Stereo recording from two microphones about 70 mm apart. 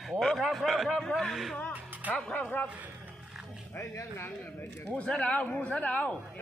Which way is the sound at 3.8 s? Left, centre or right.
Left.